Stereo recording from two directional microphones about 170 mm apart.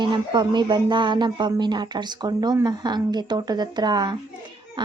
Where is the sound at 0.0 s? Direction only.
25° right (ahead or behind).